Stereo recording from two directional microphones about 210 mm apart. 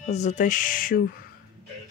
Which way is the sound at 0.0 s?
35° left (ahead or behind).